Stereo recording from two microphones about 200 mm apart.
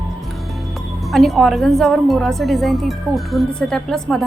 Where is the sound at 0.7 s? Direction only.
Centre (ahead or behind).